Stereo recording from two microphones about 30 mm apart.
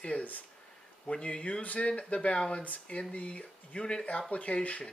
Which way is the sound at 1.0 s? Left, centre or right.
Left.